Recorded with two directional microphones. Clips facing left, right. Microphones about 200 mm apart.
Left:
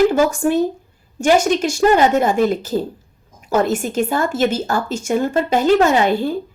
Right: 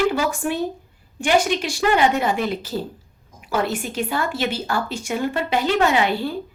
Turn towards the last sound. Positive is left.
turn(degrees=45)  # may be behind; listen again after turning